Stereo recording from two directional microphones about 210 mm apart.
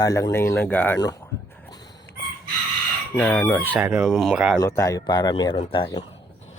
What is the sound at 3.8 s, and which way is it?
Speech, 15° right (ahead or behind).